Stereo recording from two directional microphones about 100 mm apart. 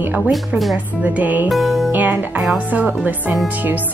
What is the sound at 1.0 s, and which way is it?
Speech, 15° right (ahead or behind).